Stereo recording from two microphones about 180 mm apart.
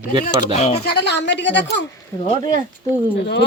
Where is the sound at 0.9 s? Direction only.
70° left (ahead or behind).